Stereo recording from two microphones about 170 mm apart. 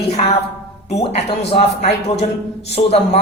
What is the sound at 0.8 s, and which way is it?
Speech, 40° left (ahead or behind).